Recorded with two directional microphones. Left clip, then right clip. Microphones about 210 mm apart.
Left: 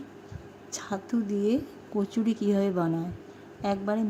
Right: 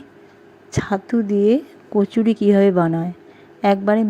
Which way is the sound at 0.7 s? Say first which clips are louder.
Right 11 dB; 25° right (ahead or behind).